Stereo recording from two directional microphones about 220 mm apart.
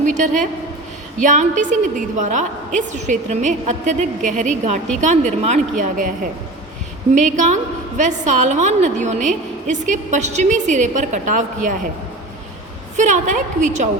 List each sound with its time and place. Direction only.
0.0 s a woman's voice: 35° right (ahead or behind)
7.1 s a woman's voice: 35° right (ahead or behind)
13.0 s a woman's voice: 35° right (ahead or behind)